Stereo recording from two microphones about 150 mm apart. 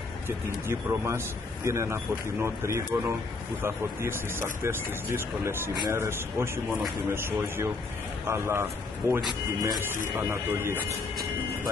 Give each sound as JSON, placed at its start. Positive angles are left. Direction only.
{"t": 0.7, "sound": "speech", "side_deg": -20}